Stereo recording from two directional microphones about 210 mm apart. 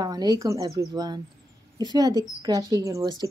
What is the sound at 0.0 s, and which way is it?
Speech, 20° right (ahead or behind).